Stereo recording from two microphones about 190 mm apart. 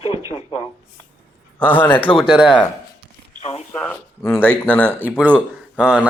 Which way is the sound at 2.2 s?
5° right (ahead or behind).